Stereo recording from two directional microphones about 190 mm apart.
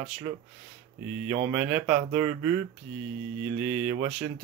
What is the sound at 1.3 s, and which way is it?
Speech, 15° right (ahead or behind).